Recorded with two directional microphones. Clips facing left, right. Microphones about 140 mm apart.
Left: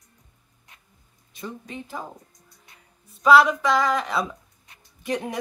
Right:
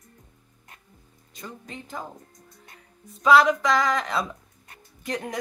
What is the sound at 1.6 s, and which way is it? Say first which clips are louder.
Speech: left 2 dB; 5° left (ahead or behind).